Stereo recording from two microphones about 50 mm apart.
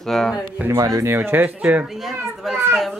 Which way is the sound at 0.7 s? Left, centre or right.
Right.